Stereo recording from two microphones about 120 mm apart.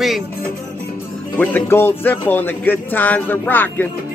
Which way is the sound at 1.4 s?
15° left (ahead or behind).